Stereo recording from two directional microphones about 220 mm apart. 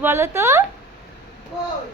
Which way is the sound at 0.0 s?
10° right (ahead or behind).